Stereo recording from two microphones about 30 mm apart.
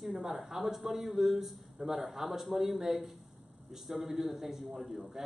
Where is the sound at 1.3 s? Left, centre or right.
Centre.